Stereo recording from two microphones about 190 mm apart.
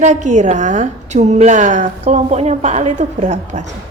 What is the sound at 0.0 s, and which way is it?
A woman's voice, 40° right (ahead or behind).